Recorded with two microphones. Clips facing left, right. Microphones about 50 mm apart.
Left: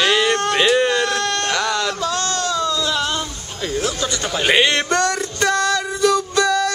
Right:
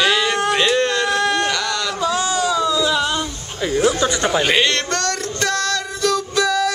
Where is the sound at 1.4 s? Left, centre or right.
Centre.